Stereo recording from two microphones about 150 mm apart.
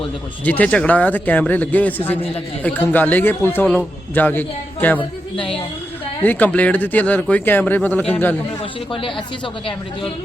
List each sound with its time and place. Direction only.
0.4 s a man's voice: 10° left (ahead or behind)
4.9 s a woman's voice: 35° left (ahead or behind)
6.2 s a man's voice: 10° left (ahead or behind)
8.9 s speech: 35° left (ahead or behind)